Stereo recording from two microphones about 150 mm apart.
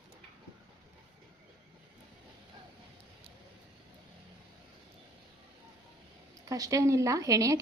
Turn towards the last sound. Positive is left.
turn(degrees=-20)  # may be behind; listen again after turning